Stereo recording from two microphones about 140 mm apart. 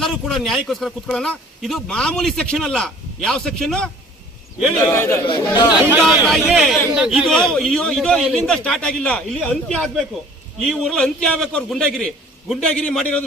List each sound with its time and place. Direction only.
0.0 s a man's voice: centre (ahead or behind)
4.8 s a man's voice: 20° left (ahead or behind)
5.2 s speech: 30° left (ahead or behind)
6.0 s a man's voice: centre (ahead or behind)